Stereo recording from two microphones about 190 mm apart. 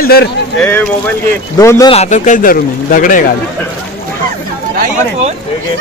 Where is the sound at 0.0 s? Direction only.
55° left (ahead or behind).